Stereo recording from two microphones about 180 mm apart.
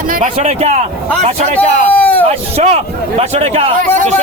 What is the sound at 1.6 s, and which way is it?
Speech, 10° left (ahead or behind).